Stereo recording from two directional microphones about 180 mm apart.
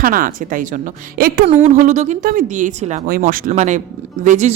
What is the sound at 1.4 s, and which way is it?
Speech, 40° right (ahead or behind).